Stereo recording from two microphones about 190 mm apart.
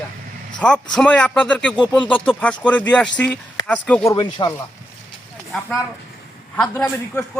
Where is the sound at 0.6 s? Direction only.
5° left (ahead or behind).